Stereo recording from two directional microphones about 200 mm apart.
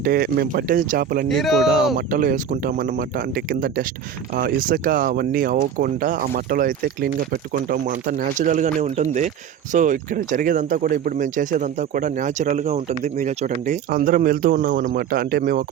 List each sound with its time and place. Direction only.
0.0 s speech: 50° right (ahead or behind)
1.3 s speech: centre (ahead or behind)
2.0 s speech: 45° right (ahead or behind)